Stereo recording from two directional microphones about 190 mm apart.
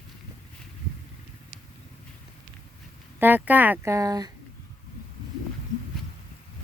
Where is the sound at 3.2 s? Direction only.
10° right (ahead or behind).